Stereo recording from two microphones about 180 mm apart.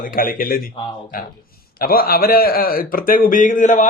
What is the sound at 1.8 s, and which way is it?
A man's voice, 55° left (ahead or behind).